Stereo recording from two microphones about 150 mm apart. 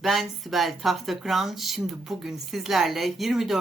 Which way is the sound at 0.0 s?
Centre (ahead or behind).